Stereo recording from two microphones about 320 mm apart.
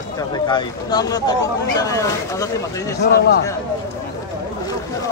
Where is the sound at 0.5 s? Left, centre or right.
Centre.